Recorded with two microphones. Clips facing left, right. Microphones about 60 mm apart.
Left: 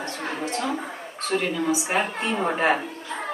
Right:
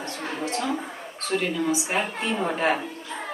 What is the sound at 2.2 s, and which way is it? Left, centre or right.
Speech, centre.